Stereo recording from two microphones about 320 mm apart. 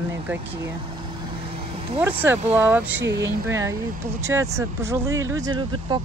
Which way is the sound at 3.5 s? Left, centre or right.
Centre.